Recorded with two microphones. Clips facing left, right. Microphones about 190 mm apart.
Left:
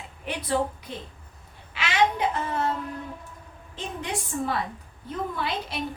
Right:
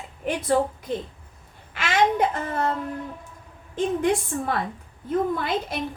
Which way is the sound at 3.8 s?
50° right (ahead or behind).